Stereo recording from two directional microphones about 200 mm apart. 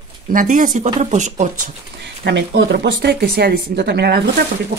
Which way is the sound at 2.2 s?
65° right (ahead or behind).